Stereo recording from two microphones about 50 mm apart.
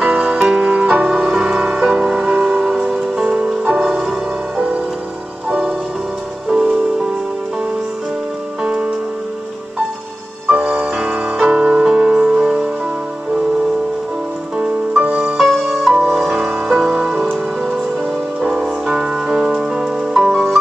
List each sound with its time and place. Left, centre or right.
0.0 s music: centre
2.2 s a sound: right
2.6 s music: centre
6.5 s music: centre
8.6 s music: centre
10.5 s music: right
14.6 s music: centre
15.3 s music: centre
18.5 s music: centre